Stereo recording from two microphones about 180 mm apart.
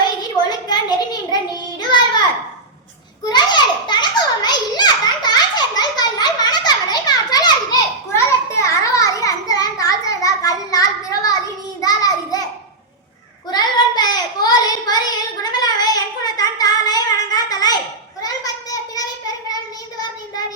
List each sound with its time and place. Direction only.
0.7 s a sound: 25° left (ahead or behind)
3.2 s children playing: 25° left (ahead or behind)
11.8 s child singing: 20° left (ahead or behind)
13.5 s child singing: 25° left (ahead or behind)
18.2 s a sound: 20° left (ahead or behind)
19.5 s child singing: 20° left (ahead or behind)